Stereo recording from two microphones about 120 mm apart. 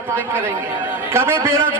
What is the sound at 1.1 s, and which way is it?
Speech, 20° right (ahead or behind).